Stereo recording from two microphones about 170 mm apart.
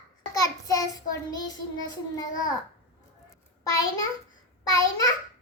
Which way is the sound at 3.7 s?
20° left (ahead or behind).